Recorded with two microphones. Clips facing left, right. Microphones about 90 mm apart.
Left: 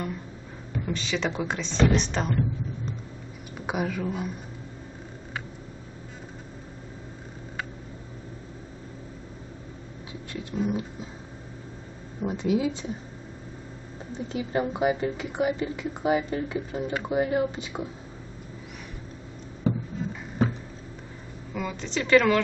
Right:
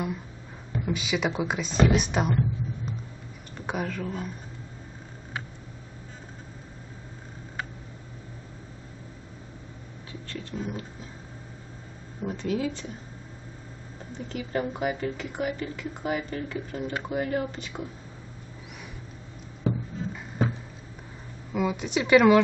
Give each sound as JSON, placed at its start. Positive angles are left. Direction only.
{"t": 0.8, "sound": "speech", "side_deg": -10}
{"t": 3.5, "sound": "speech", "side_deg": 5}
{"t": 10.3, "sound": "speech", "side_deg": 10}
{"t": 12.2, "sound": "speech", "side_deg": 15}
{"t": 14.3, "sound": "speech", "side_deg": 20}
{"t": 19.6, "sound": "music", "side_deg": 0}
{"t": 21.5, "sound": "speech", "side_deg": -10}